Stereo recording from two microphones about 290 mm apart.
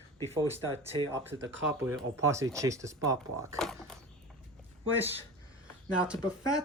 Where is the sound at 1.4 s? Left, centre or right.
Right.